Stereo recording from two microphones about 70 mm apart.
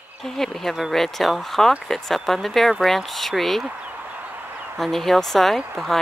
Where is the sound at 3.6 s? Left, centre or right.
Centre.